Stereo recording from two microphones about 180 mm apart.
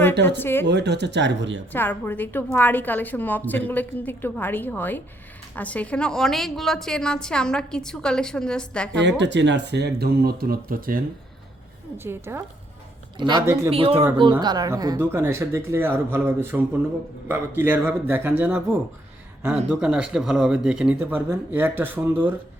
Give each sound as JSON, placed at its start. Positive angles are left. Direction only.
{"t": 0.1, "sound": "speech", "side_deg": -70}
{"t": 0.3, "sound": "a woman's voice", "side_deg": 10}
{"t": 0.7, "sound": "speech", "side_deg": -70}
{"t": 1.7, "sound": "a woman's voice", "side_deg": 10}
{"t": 9.0, "sound": "speech", "side_deg": -80}
{"t": 11.9, "sound": "speech", "side_deg": -15}
{"t": 13.1, "sound": "speech", "side_deg": -25}
{"t": 13.4, "sound": "speech", "side_deg": -15}
{"t": 13.7, "sound": "a woman's voice", "side_deg": -30}